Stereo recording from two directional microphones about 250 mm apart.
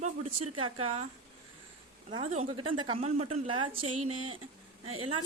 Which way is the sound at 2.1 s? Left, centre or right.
Right.